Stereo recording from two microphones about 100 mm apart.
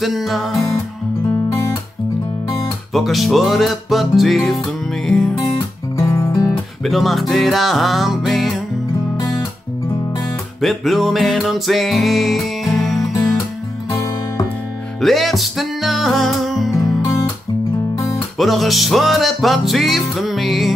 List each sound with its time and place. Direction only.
0.0 s music: centre (ahead or behind)
2.9 s music: centre (ahead or behind)
5.9 s music: 30° left (ahead or behind)
6.8 s music: centre (ahead or behind)
10.6 s music: centre (ahead or behind)
13.0 s music: 35° left (ahead or behind)
15.0 s music: centre (ahead or behind)
18.4 s music: centre (ahead or behind)